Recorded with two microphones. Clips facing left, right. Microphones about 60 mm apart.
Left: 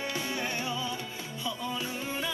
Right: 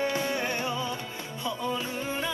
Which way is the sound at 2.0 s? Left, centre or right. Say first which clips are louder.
Right 3 dB; centre.